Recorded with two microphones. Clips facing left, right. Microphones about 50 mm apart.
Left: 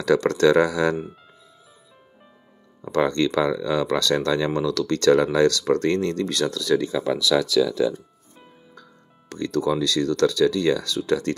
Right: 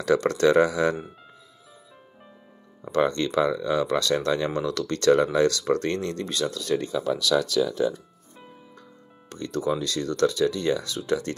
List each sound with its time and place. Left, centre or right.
0.0 s speech: left
3.2 s speech: left
4.6 s speech: right
4.8 s speech: left
9.3 s speech: left